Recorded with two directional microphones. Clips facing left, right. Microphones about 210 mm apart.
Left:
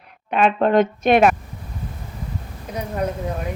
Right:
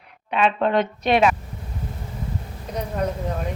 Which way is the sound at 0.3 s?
50° left (ahead or behind).